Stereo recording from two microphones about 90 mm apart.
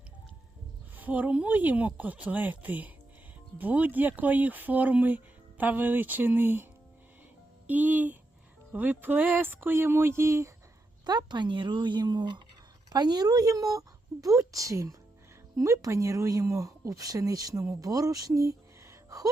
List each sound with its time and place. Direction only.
0.9 s speech: 20° right (ahead or behind)
7.7 s speech: 20° right (ahead or behind)
11.0 s speech: 50° right (ahead or behind); by 19.3 s 35° right (ahead or behind)